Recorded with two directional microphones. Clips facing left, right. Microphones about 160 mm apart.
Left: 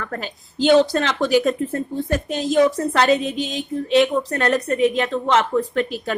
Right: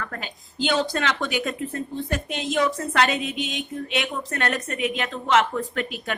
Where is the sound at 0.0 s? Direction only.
40° left (ahead or behind).